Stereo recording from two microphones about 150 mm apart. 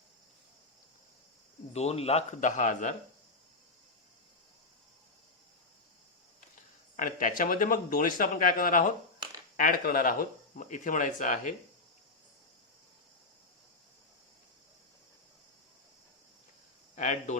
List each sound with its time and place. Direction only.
1.7 s speech: 45° left (ahead or behind)
6.9 s speech: 60° left (ahead or behind)
16.9 s a sound: 55° left (ahead or behind)